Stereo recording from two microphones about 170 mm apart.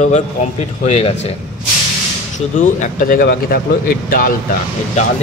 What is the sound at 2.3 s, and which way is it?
Speech, 45° left (ahead or behind).